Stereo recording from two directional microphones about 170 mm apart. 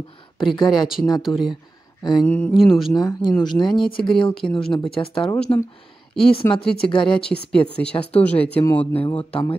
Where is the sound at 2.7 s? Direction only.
Centre (ahead or behind).